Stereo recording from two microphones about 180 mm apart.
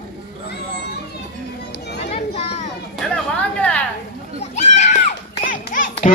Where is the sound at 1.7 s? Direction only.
65° left (ahead or behind).